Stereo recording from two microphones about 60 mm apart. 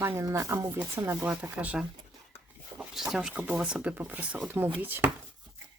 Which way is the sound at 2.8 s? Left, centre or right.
Centre.